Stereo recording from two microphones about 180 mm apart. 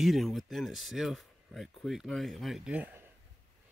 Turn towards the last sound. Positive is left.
turn(degrees=-10)  # may be behind; listen again after turning